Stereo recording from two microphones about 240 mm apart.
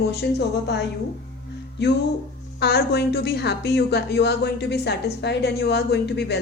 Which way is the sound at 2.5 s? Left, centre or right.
Left.